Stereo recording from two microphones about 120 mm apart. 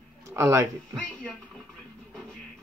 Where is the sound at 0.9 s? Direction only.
10° left (ahead or behind).